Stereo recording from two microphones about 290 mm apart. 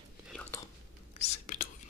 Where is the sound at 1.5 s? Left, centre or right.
Left.